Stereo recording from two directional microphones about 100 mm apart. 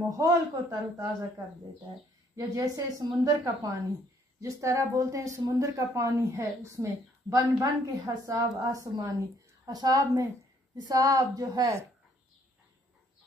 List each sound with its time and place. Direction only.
0.1 s a woman's voice: 35° right (ahead or behind)
2.3 s a woman's voice: 35° right (ahead or behind)